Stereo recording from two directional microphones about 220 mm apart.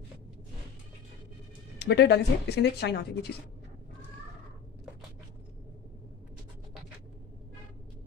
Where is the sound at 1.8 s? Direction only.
50° left (ahead or behind).